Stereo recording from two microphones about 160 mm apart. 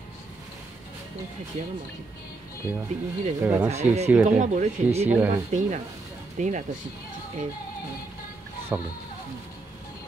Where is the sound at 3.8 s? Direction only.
45° right (ahead or behind).